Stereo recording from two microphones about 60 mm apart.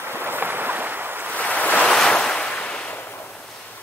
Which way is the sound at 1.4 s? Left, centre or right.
Left.